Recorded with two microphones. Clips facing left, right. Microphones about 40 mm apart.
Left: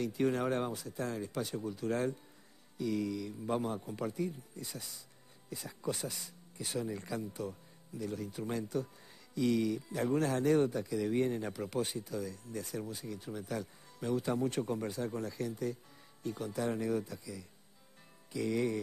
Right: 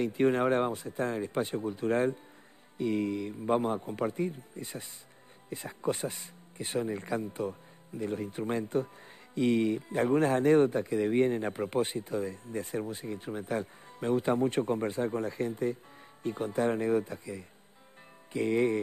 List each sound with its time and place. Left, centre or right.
0.0 s speech: right